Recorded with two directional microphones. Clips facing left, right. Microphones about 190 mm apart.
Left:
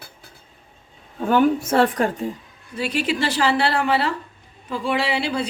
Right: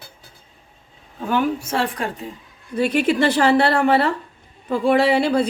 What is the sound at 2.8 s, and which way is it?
A woman's voice, 55° right (ahead or behind).